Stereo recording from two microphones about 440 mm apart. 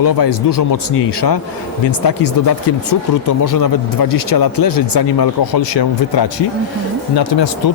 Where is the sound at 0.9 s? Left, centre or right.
Left.